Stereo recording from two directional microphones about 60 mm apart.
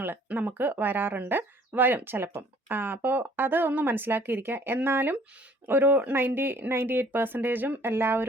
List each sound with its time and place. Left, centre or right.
0.3 s speech: right